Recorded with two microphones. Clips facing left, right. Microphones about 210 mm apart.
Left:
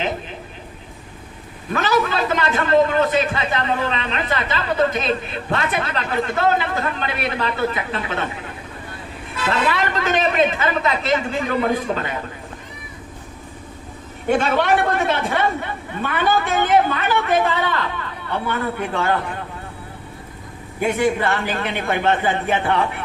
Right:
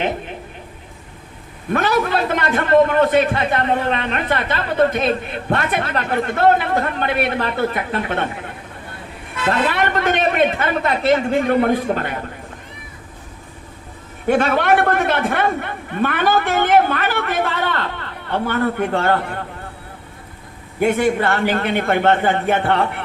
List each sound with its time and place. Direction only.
1.7 s a man's voice: 55° right (ahead or behind)
9.5 s a man's voice: 55° right (ahead or behind)
14.3 s a man's voice: 55° right (ahead or behind)
20.8 s a man's voice: 55° right (ahead or behind)